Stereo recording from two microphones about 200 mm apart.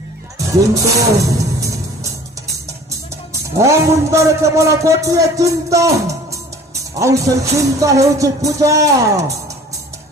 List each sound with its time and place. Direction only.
0.3 s music: 15° right (ahead or behind)
2.6 s speech: 15° right (ahead or behind)
6.9 s music: 15° right (ahead or behind)